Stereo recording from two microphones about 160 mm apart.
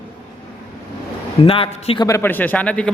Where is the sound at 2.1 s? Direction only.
15° left (ahead or behind).